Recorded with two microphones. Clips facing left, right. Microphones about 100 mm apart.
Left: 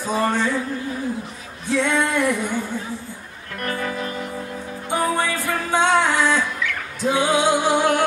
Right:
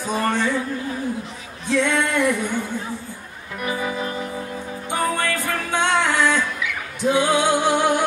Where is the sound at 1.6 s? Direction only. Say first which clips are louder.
Even; 15° left (ahead or behind).